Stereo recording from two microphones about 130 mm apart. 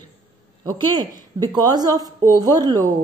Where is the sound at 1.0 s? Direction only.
30° right (ahead or behind).